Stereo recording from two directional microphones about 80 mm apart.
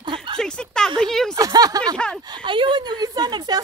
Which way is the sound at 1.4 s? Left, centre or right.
Right.